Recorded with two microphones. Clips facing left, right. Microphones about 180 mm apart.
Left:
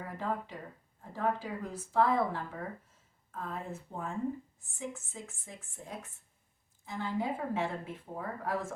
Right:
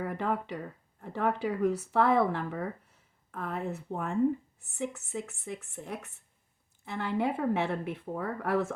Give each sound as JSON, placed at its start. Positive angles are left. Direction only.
{"t": 0.0, "sound": "speech", "side_deg": -65}